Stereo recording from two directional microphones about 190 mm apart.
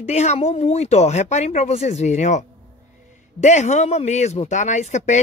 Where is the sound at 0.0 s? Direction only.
35° left (ahead or behind).